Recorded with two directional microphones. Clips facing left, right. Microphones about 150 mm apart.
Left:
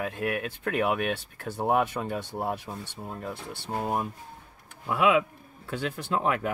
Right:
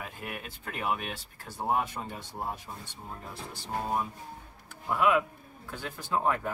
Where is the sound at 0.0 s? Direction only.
70° left (ahead or behind).